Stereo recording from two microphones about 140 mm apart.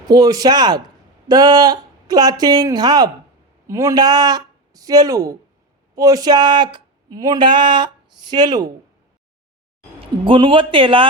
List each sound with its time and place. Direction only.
0.1 s speech: 25° right (ahead or behind)
10.2 s speech: 35° right (ahead or behind)